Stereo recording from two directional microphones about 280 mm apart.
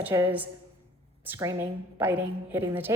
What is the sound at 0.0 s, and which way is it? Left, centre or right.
A woman's voice, centre.